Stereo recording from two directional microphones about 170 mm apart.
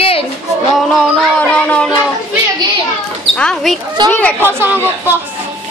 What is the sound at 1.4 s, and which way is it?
Music, 5° left (ahead or behind).